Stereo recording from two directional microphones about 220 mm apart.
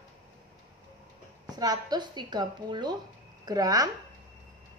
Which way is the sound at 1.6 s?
15° right (ahead or behind).